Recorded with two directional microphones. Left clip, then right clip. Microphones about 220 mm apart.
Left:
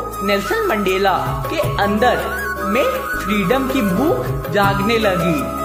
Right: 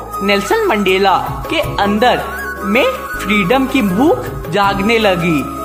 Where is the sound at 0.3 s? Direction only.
20° right (ahead or behind).